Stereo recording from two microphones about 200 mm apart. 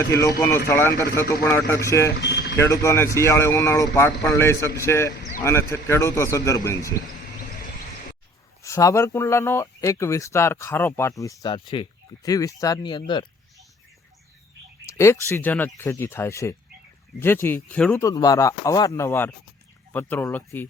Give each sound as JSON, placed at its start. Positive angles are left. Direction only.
{"t": 0.0, "sound": "speech", "side_deg": 15}
{"t": 2.2, "sound": "vehicle", "side_deg": 60}
{"t": 2.8, "sound": "speech", "side_deg": 15}
{"t": 8.6, "sound": "speech", "side_deg": 15}
{"t": 14.8, "sound": "speech", "side_deg": 15}